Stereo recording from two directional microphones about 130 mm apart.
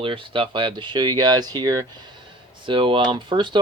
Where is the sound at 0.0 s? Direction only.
40° right (ahead or behind).